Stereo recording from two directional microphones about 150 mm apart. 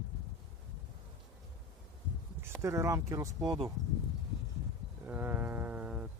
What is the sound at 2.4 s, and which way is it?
Speech, 15° right (ahead or behind).